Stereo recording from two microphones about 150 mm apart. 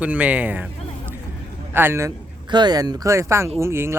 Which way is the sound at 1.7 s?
15° right (ahead or behind).